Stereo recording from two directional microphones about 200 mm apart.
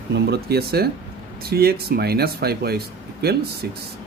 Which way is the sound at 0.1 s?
55° right (ahead or behind).